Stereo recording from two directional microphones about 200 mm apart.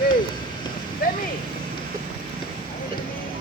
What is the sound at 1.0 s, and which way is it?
Speech, 50° left (ahead or behind).